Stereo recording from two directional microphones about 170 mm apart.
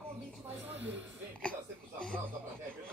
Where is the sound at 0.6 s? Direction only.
10° right (ahead or behind).